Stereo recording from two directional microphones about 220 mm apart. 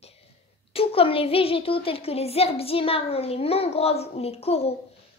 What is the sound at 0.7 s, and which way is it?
A child's voice, 25° left (ahead or behind).